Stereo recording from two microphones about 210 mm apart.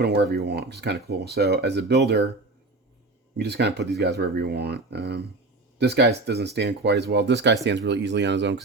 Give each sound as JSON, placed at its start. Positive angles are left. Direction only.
{"t": 0.0, "sound": "speech", "side_deg": -50}
{"t": 3.3, "sound": "speech", "side_deg": -50}